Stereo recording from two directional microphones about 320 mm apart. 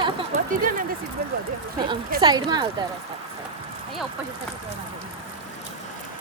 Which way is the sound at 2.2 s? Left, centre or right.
Centre.